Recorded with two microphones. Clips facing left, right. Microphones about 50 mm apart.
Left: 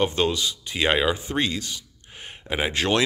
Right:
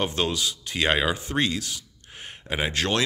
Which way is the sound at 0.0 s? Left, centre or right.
Centre.